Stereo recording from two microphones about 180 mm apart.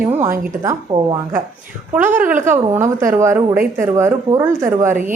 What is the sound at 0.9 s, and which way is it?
Speech, 25° right (ahead or behind).